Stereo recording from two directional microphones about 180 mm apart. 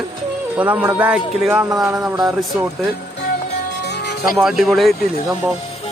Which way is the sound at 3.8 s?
65° left (ahead or behind).